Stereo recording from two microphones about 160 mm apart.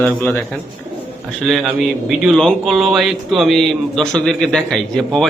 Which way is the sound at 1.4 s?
Centre (ahead or behind).